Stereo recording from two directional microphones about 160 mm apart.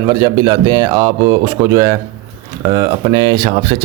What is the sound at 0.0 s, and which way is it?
A man's voice, 25° right (ahead or behind).